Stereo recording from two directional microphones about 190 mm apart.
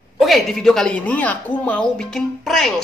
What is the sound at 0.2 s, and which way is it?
A woman's voice, centre (ahead or behind).